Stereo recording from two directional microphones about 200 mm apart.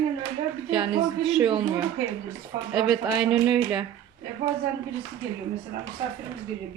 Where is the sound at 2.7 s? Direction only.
Centre (ahead or behind).